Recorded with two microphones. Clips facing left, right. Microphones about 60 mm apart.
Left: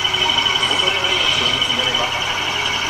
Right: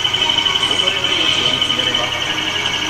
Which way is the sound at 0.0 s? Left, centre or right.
Left.